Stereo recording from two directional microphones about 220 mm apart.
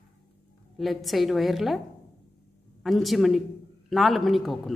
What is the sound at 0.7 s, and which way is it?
A man's voice, centre (ahead or behind).